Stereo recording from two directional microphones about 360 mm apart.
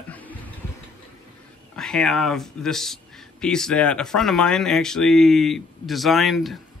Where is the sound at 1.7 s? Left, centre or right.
Centre.